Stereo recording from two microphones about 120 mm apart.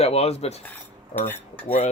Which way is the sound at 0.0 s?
60° left (ahead or behind).